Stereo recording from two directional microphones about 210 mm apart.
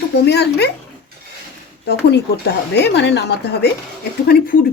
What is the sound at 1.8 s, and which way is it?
Speech, 50° left (ahead or behind).